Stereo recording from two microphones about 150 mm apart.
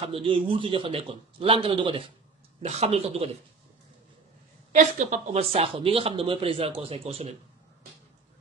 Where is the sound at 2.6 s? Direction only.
45° right (ahead or behind).